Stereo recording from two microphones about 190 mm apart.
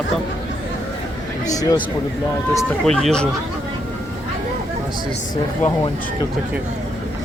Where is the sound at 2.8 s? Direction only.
5° left (ahead or behind).